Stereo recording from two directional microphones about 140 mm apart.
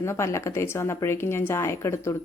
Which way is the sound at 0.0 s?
20° left (ahead or behind).